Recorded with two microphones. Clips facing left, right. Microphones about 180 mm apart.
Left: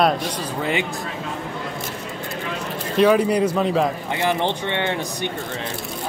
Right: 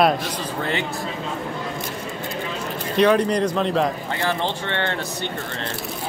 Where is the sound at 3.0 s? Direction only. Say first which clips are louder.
Left 1 dB; 5° left (ahead or behind).